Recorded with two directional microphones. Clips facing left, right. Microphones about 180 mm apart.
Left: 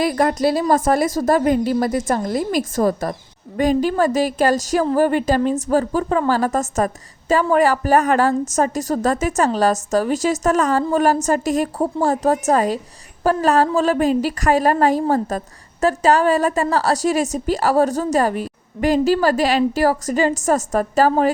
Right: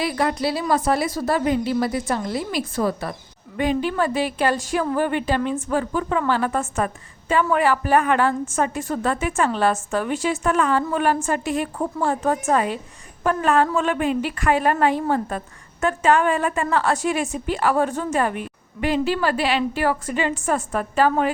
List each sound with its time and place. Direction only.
0.0 s a woman's voice: 45° left (ahead or behind)